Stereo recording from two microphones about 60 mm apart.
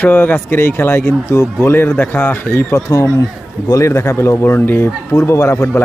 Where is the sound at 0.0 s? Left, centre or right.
Left.